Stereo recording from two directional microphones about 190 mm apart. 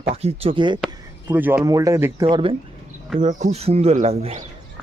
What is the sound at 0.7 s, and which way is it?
Speech, 5° right (ahead or behind).